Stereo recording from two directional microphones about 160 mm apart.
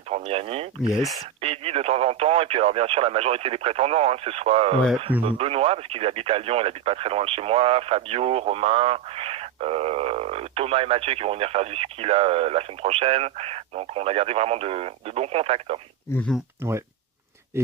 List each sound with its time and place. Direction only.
0.1 s speech: 40° right (ahead or behind)
0.8 s speech: 5° right (ahead or behind)
1.4 s speech: 40° right (ahead or behind)